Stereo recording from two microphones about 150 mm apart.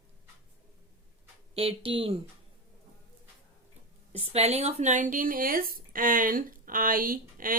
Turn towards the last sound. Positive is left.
turn(degrees=-70)  # may be behind; listen again after turning